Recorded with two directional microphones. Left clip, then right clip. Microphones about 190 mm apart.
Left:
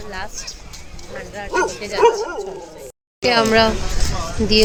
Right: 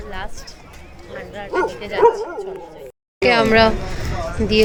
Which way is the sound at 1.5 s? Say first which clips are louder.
Left 1 dB; 5° right (ahead or behind).